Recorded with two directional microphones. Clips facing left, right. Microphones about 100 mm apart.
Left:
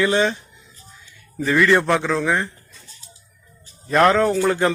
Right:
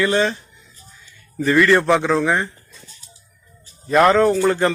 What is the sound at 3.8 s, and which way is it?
Speech, 5° right (ahead or behind).